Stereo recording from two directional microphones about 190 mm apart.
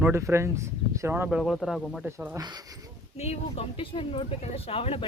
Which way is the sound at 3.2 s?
35° left (ahead or behind).